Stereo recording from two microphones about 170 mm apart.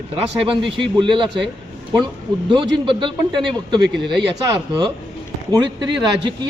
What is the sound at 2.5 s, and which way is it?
A man's voice, 30° right (ahead or behind).